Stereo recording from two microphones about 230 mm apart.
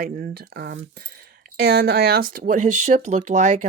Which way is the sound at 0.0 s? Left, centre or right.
Right.